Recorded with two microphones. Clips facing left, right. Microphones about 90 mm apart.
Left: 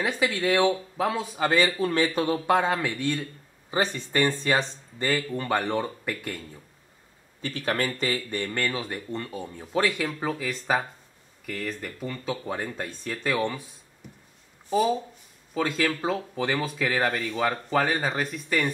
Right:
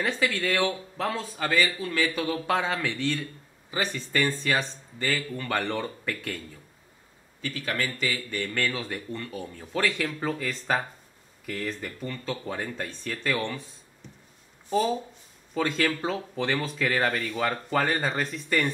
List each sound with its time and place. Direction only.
0.0 s speech: 20° left (ahead or behind)
1.8 s speech: 35° left (ahead or behind)
2.3 s speech: 10° left (ahead or behind)
3.7 s speech: 20° left (ahead or behind)
5.6 s speech: 10° left (ahead or behind)
7.4 s speech: 35° left (ahead or behind)
8.4 s speech: 20° left (ahead or behind)
14.7 s speech: 10° left (ahead or behind)